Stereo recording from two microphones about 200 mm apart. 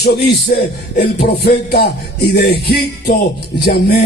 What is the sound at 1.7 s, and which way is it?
Speech, 55° left (ahead or behind).